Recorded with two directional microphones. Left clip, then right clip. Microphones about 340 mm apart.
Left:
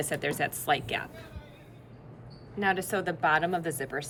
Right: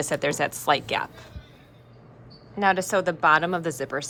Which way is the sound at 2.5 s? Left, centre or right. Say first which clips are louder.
Right 7 dB; centre.